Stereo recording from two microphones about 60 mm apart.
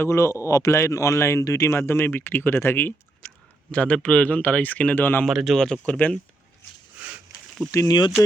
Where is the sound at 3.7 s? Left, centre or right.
Centre.